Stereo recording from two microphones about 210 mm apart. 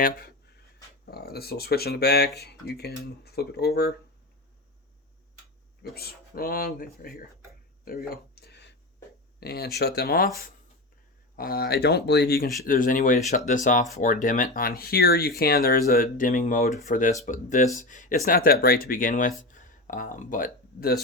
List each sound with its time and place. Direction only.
0.0 s speech: 45° left (ahead or behind)
5.8 s speech: 45° left (ahead or behind)
7.9 s a sound: 45° left (ahead or behind)
9.4 s speech: 50° left (ahead or behind)
11.3 s speech: 45° left (ahead or behind)